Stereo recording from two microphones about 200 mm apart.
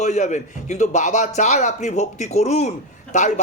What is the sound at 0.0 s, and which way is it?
A man's voice, 35° left (ahead or behind).